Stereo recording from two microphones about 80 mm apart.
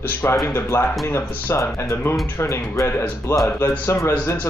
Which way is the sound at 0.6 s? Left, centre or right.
Left.